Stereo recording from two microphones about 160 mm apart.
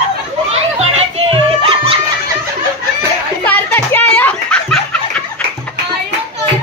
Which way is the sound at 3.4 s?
10° left (ahead or behind).